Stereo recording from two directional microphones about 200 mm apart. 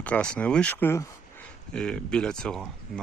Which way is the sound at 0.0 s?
5° left (ahead or behind).